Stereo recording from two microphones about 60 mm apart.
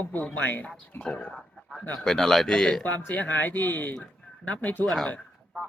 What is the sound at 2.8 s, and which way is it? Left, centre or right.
Speech, left.